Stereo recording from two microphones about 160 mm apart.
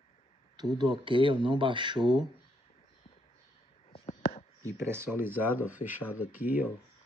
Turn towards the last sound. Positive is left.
turn(degrees=-10)  # may be behind; listen again after turning